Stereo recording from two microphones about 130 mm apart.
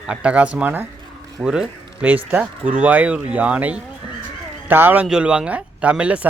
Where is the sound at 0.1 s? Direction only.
10° right (ahead or behind).